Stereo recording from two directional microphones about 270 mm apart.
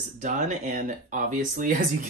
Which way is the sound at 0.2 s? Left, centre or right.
Right.